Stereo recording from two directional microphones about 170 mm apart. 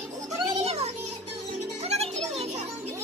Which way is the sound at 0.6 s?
35° right (ahead or behind).